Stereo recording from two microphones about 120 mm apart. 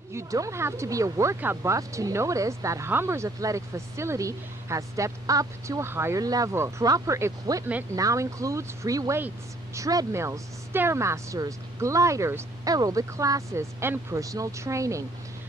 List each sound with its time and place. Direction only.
0.1 s speech: 25° right (ahead or behind)